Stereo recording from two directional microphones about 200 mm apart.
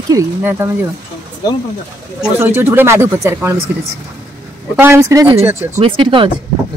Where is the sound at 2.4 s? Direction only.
10° right (ahead or behind).